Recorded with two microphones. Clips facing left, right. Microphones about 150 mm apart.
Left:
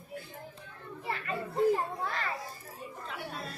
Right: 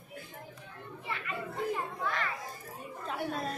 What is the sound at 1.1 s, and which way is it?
Children playing, 40° left (ahead or behind).